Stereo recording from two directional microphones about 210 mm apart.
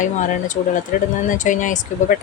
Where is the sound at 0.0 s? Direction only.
35° left (ahead or behind).